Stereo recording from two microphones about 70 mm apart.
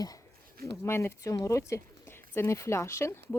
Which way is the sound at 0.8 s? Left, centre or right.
Left.